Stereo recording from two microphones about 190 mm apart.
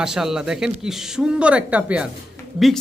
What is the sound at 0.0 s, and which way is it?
A woman's voice, 5° right (ahead or behind).